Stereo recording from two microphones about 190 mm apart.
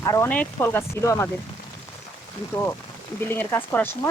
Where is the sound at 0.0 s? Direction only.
15° left (ahead or behind).